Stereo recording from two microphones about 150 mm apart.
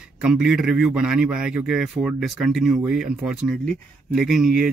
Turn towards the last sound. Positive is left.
turn(degrees=-5)  # may be behind; listen again after turning